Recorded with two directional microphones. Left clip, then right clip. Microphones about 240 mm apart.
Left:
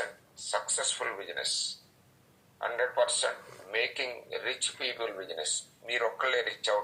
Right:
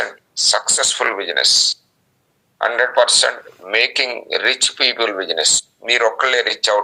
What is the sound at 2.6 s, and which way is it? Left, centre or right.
A man's voice, right.